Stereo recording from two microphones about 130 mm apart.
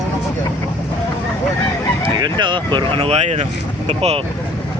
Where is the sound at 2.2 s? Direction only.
35° right (ahead or behind).